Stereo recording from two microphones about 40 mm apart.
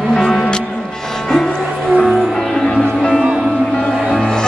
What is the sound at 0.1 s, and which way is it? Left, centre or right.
Music, centre.